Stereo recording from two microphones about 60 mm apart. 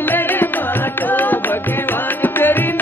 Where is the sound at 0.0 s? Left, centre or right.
Left.